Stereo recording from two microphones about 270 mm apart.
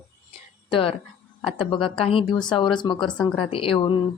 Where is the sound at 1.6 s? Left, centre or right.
Centre.